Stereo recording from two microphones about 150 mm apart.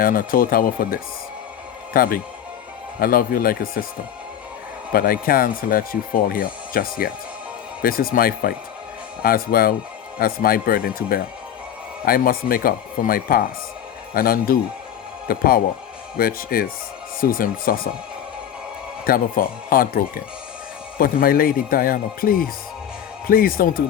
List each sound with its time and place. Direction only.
0.0 s a man's voice: 70° left (ahead or behind)
4.9 s speech: 75° left (ahead or behind)
19.0 s speech: 70° left (ahead or behind)